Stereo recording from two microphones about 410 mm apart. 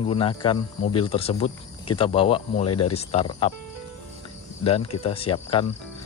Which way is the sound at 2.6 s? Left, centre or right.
Left.